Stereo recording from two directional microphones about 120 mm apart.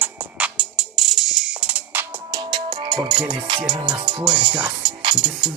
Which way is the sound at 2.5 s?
40° right (ahead or behind).